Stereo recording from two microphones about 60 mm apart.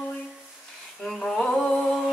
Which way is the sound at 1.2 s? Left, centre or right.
Centre.